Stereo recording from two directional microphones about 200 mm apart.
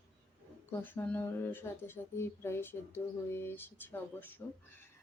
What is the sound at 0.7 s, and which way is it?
Speech, 10° left (ahead or behind).